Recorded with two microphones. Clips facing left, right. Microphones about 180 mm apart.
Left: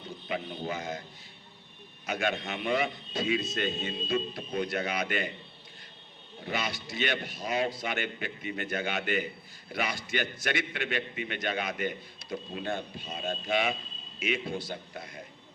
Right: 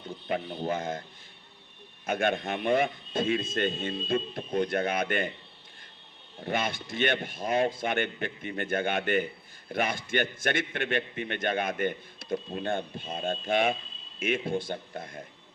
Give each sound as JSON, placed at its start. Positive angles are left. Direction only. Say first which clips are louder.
{"t": 0.3, "sound": "a man's voice", "louder": "right 4 dB", "side_deg": -50}
{"t": 2.0, "sound": "a man's voice", "louder": "right 4 dB", "side_deg": -50}
{"t": 6.4, "sound": "a man's voice", "louder": "right 3 dB", "side_deg": -50}